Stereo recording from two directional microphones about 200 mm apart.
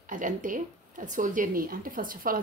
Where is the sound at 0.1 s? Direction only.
40° right (ahead or behind).